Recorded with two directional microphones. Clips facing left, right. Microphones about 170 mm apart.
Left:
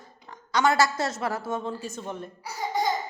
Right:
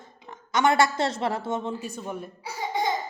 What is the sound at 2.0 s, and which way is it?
Speech, 5° right (ahead or behind).